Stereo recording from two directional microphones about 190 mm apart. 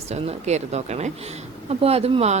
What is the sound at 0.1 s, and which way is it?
Speech, 35° right (ahead or behind).